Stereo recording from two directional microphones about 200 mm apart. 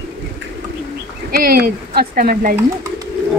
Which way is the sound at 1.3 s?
50° right (ahead or behind).